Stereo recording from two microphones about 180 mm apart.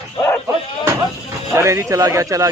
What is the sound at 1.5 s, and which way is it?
Speech, 15° right (ahead or behind).